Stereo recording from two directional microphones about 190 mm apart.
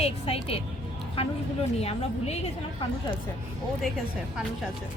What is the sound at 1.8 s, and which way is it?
Speech, 35° left (ahead or behind).